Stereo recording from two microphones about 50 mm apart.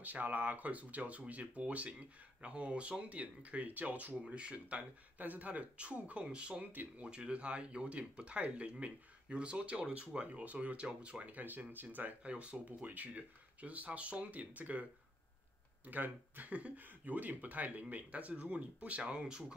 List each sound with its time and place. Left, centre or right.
0.0 s speech: right
6.2 s speech: centre
6.6 s speech: right
7.0 s speech: right
12.2 s speech: right